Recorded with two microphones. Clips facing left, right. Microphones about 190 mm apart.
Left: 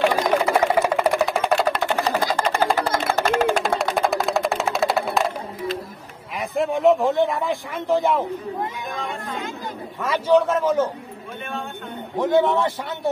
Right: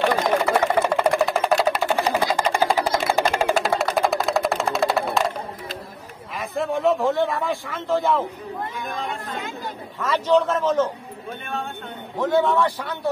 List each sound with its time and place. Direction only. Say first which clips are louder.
0.4 s a sound: left 1 dB; 5° left (ahead or behind)
6.5 s a man's voice: left 3 dB; 15° left (ahead or behind)
10.0 s a man's voice: left 1 dB; 10° left (ahead or behind)
12.2 s a man's voice: left 1 dB; 20° left (ahead or behind)